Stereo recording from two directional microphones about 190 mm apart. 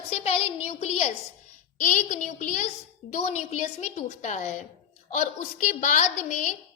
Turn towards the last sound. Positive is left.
turn(degrees=35)  # may be behind; listen again after turning